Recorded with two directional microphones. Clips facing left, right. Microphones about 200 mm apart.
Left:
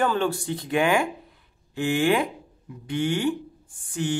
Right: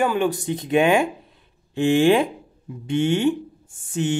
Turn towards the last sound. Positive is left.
turn(degrees=-25)  # may be behind; listen again after turning